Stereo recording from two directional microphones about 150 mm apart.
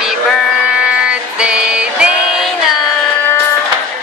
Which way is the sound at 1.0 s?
5° right (ahead or behind).